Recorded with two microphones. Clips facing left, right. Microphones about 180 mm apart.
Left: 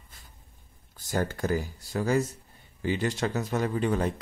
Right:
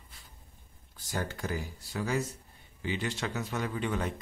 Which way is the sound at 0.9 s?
45° left (ahead or behind).